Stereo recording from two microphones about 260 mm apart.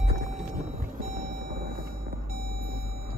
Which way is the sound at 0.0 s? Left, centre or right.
Right.